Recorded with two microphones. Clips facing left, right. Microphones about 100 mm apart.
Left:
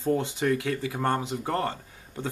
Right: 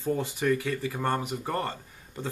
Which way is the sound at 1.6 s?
15° left (ahead or behind).